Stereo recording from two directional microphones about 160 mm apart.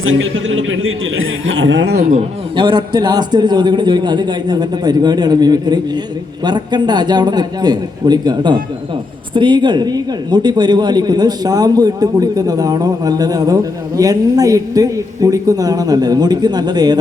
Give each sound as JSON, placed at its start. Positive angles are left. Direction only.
{"t": 1.8, "sound": "speech", "side_deg": -85}
{"t": 2.6, "sound": "speech", "side_deg": -30}